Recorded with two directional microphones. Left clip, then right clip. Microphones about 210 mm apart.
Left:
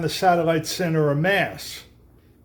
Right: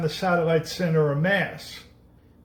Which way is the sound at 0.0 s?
55° left (ahead or behind).